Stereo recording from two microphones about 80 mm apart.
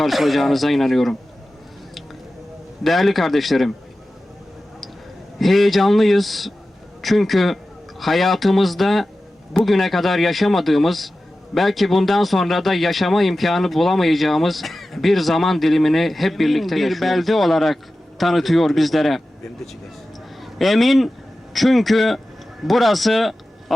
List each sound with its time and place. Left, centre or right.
0.0 s speech: centre
2.8 s speech: centre
5.4 s a man's voice: centre
20.4 s a man's voice: centre